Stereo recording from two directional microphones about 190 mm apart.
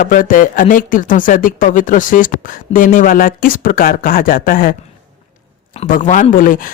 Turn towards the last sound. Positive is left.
turn(degrees=45)  # may be behind; listen again after turning